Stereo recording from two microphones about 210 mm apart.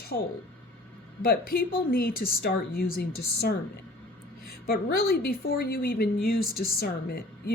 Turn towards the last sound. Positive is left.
turn(degrees=45)  # may be behind; listen again after turning